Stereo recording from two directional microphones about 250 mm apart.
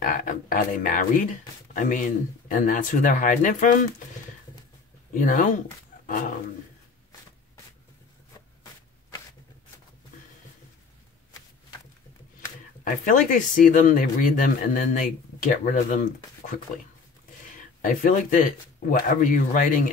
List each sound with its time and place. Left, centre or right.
0.0 s speech: left
5.1 s speech: left
12.8 s speech: left
17.8 s speech: left